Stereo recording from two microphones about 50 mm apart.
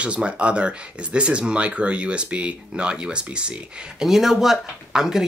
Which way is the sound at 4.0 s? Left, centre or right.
Centre.